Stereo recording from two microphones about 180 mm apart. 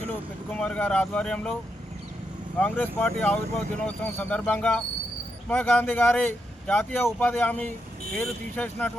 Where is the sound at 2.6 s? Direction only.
10° left (ahead or behind).